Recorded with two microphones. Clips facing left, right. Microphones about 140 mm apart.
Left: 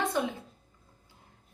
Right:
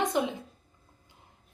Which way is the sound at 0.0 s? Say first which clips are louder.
Right 2 dB; 20° right (ahead or behind).